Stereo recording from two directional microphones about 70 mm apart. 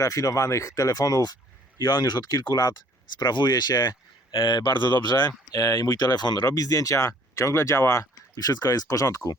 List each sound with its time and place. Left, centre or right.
0.0 s speech: left
1.8 s speech: left
4.4 s speech: left
5.5 s speech: left
8.4 s speech: left